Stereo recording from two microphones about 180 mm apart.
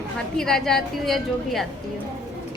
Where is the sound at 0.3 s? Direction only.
5° left (ahead or behind).